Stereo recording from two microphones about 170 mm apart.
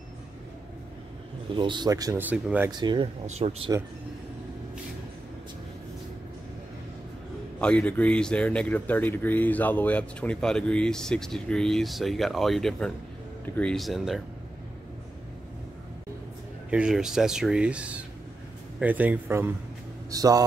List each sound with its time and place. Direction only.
1.5 s speech: 30° right (ahead or behind)
2.2 s speech: 5° right (ahead or behind)
2.8 s speech: 25° right (ahead or behind)
3.3 s speech: 40° right (ahead or behind)
7.6 s speech: 5° left (ahead or behind)
16.7 s speech: 5° right (ahead or behind); by 20.4 s 20° right (ahead or behind)